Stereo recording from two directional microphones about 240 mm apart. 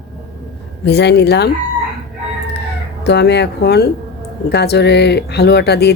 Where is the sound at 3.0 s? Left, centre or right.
Left.